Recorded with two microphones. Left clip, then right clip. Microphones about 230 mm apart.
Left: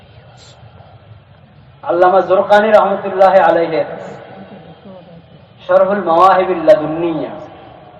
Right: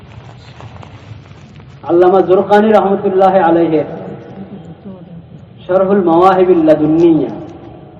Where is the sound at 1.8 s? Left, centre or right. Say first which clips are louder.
Right 1 dB; centre.